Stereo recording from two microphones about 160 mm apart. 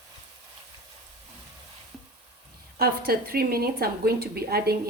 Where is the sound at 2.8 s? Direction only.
70° right (ahead or behind).